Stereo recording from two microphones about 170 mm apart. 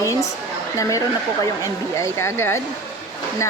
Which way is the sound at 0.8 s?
20° left (ahead or behind).